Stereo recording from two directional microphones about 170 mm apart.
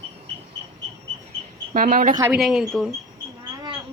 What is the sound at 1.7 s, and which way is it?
Speech, 55° right (ahead or behind).